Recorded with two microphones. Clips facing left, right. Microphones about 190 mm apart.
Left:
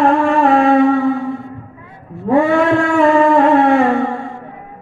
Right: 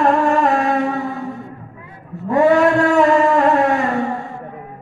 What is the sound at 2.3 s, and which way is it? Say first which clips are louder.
Chant: left 1 dB; 40° right (ahead or behind).